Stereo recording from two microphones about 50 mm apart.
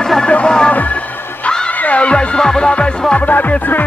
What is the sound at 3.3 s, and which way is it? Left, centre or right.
Music, left.